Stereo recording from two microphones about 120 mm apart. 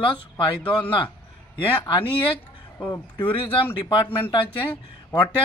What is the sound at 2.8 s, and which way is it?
Speech, 40° left (ahead or behind).